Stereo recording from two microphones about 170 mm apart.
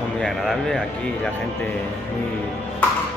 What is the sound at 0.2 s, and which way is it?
Speech, centre (ahead or behind).